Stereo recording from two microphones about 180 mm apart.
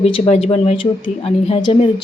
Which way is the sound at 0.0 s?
35° left (ahead or behind).